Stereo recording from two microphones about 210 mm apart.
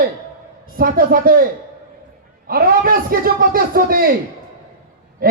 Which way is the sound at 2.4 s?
45° right (ahead or behind).